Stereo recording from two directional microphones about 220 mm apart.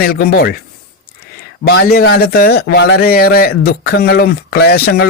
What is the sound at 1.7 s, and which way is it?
A man's voice, 45° left (ahead or behind).